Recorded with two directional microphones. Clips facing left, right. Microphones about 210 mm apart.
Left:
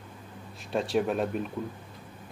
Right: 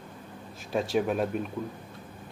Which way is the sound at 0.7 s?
Centre (ahead or behind).